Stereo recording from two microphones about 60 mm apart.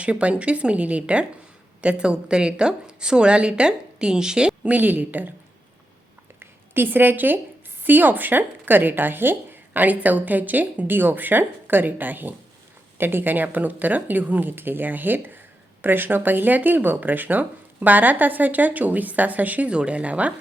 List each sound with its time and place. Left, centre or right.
0.0 s a woman's voice: right
6.4 s a woman's voice: right